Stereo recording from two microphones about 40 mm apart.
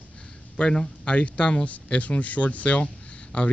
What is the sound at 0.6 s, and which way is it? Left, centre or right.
Speech, left.